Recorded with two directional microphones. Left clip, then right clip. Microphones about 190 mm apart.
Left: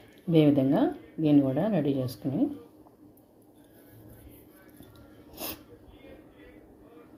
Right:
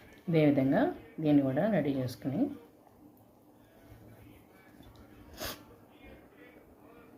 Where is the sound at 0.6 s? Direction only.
20° left (ahead or behind).